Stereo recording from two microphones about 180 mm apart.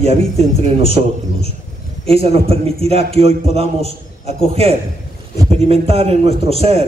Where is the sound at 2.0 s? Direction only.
35° right (ahead or behind).